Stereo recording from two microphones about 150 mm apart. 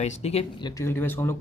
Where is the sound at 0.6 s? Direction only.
20° left (ahead or behind).